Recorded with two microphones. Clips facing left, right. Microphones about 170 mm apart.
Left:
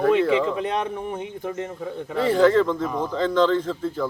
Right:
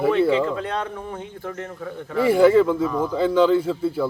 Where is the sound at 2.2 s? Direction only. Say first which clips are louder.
Right 3 dB; 10° right (ahead or behind).